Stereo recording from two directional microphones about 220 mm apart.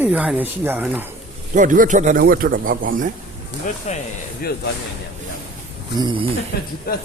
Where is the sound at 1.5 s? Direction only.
35° right (ahead or behind).